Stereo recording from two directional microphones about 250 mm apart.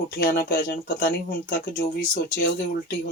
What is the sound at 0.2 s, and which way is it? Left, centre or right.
Speech, left.